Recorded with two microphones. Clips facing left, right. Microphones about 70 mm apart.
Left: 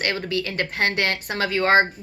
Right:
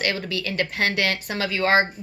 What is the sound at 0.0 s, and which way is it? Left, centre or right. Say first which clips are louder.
Speech: left 1 dB; left.